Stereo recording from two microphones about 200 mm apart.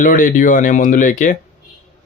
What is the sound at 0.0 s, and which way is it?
Speech, 40° left (ahead or behind).